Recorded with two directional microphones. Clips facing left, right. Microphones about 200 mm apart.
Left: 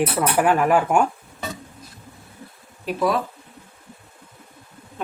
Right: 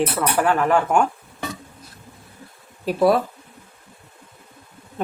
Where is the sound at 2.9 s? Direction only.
40° right (ahead or behind).